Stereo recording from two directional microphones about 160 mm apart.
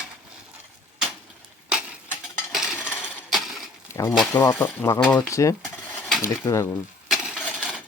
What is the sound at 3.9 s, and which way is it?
Speech, 15° left (ahead or behind).